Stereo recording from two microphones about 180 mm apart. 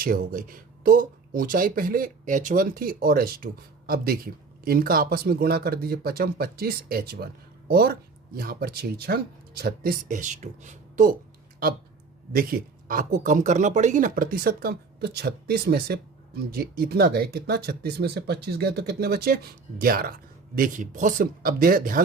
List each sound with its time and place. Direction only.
0.0 s speech: 50° right (ahead or behind)
12.3 s speech: 55° right (ahead or behind)